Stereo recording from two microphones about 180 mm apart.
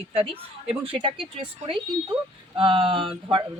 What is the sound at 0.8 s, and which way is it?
Speech, 30° right (ahead or behind).